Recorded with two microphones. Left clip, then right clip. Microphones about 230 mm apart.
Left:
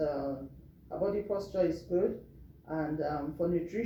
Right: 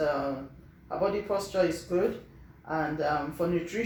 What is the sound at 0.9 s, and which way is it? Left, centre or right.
Speech, right.